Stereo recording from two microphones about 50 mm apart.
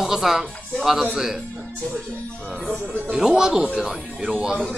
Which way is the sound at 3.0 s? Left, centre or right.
Centre.